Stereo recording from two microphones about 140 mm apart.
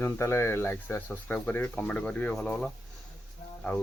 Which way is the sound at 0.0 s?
20° left (ahead or behind).